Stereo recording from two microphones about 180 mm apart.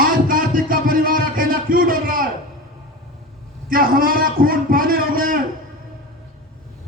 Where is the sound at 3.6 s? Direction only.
50° right (ahead or behind).